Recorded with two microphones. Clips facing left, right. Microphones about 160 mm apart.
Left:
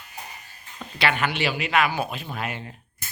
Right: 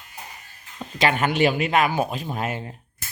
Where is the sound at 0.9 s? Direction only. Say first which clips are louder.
Right 4 dB; 45° right (ahead or behind).